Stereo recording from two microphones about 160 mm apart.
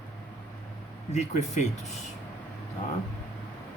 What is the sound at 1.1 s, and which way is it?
Speech, 45° left (ahead or behind).